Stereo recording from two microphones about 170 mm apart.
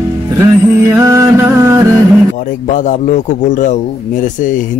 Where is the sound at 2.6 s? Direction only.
50° left (ahead or behind).